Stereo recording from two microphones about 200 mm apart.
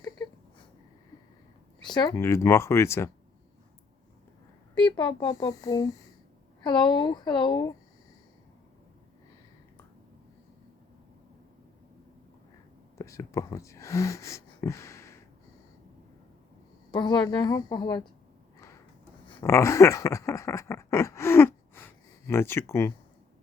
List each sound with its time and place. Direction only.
1.8 s speech: 20° left (ahead or behind)
4.8 s speech: 25° left (ahead or behind)
13.0 s speech: 15° left (ahead or behind)
16.9 s speech: 20° left (ahead or behind)
19.4 s speech: 15° left (ahead or behind)